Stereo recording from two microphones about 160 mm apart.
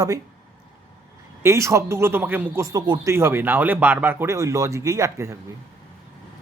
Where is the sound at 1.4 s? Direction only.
20° right (ahead or behind).